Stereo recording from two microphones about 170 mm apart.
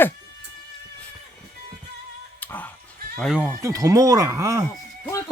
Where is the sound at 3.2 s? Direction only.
5° right (ahead or behind).